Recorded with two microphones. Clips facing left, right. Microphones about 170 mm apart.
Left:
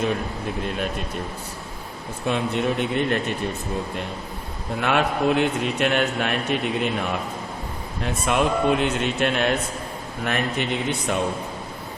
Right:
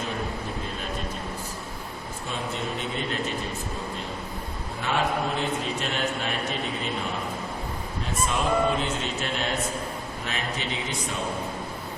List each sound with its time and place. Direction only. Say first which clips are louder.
2.2 s a man's voice: left 9 dB; 65° left (ahead or behind)
4.8 s a man's voice: left 5 dB; 65° left (ahead or behind)
8.0 s a man's voice: left 5 dB; 70° left (ahead or behind)